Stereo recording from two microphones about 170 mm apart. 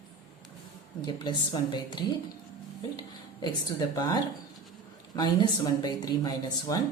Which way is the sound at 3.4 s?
20° left (ahead or behind).